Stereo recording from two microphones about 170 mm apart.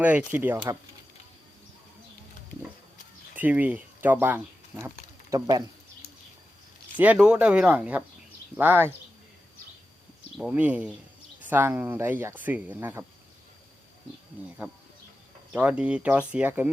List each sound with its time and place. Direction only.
0.0 s speech: 10° right (ahead or behind)
3.3 s speech: 10° right (ahead or behind)
5.3 s speech: 25° right (ahead or behind)
6.9 s speech: 10° right (ahead or behind)
10.3 s speech: 5° right (ahead or behind)
14.6 s speech: 10° right (ahead or behind)